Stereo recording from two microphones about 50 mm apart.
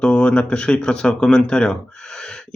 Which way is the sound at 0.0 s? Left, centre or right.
Left.